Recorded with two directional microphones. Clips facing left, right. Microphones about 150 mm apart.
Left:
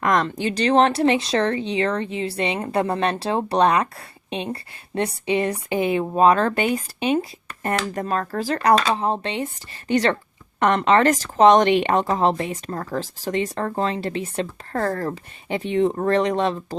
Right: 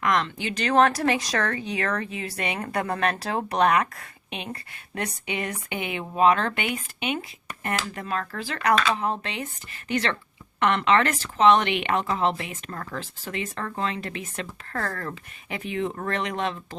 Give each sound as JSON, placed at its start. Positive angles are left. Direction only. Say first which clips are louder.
{"t": 0.0, "sound": "speech", "louder": "left 4 dB", "side_deg": 40}